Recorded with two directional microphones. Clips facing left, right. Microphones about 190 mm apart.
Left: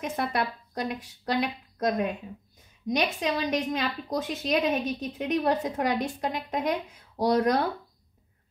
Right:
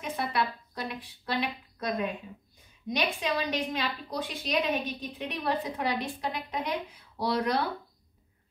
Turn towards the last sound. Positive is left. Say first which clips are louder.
# left 5 dB
turn(degrees=45)  # may be behind; listen again after turning